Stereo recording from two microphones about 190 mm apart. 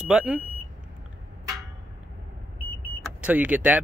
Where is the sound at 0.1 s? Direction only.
5° right (ahead or behind).